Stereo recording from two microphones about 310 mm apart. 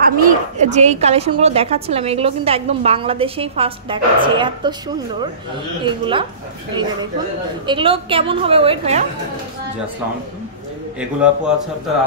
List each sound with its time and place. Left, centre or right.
0.0 s a woman's voice: right
5.9 s a woman's voice: centre